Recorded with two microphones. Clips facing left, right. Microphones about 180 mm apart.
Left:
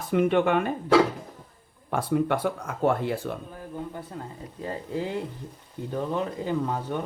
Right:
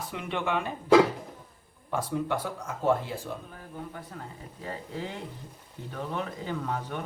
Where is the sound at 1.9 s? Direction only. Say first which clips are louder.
Left 5 dB; 60° left (ahead or behind).